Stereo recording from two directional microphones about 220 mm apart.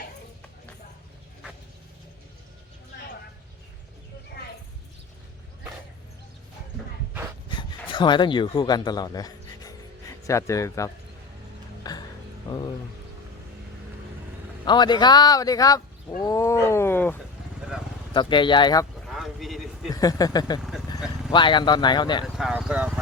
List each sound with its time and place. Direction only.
7.6 s speech: 20° left (ahead or behind)
11.8 s music: 15° left (ahead or behind)
12.5 s a sound: 20° left (ahead or behind)
14.6 s speech: 20° left (ahead or behind)
18.1 s speech: 20° left (ahead or behind)
19.0 s a sound: centre (ahead or behind)
19.9 s speech: 15° left (ahead or behind)
20.6 s vehicle: centre (ahead or behind)
21.3 s speech: 20° left (ahead or behind)
22.2 s speech: centre (ahead or behind)